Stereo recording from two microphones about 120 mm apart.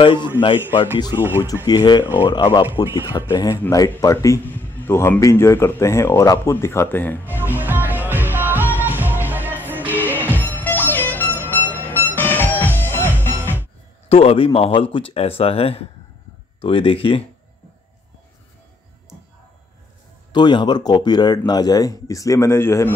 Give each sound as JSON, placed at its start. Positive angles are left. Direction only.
{"t": 0.0, "sound": "speech", "side_deg": 45}
{"t": 1.1, "sound": "speech", "side_deg": -20}
{"t": 1.7, "sound": "speech", "side_deg": 35}
{"t": 2.7, "sound": "speech", "side_deg": -20}
{"t": 3.3, "sound": "speech", "side_deg": 25}
{"t": 4.5, "sound": "speech", "side_deg": 15}
{"t": 7.3, "sound": "music", "side_deg": -15}
{"t": 9.8, "sound": "music", "side_deg": 15}
{"t": 14.0, "sound": "speech", "side_deg": 55}
{"t": 20.3, "sound": "speech", "side_deg": 40}